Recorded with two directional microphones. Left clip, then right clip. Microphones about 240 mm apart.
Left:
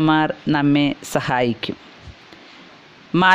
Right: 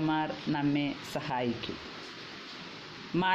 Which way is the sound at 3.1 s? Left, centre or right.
Left.